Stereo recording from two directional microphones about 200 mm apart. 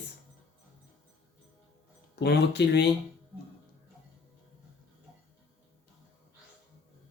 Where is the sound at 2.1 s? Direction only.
55° left (ahead or behind).